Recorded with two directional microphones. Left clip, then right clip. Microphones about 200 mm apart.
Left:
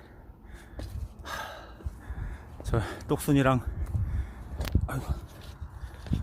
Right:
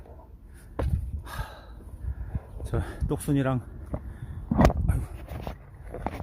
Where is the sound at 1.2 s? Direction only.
Centre (ahead or behind).